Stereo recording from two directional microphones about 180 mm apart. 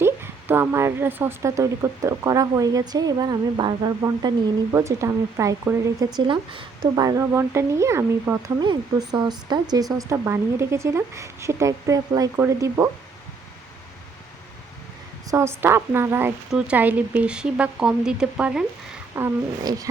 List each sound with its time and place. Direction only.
0.0 s speech: 10° right (ahead or behind)
15.3 s speech: 15° right (ahead or behind)
19.1 s speech: 20° right (ahead or behind)